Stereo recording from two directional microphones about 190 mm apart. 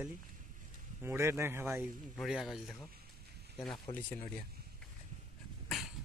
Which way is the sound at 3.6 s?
20° left (ahead or behind).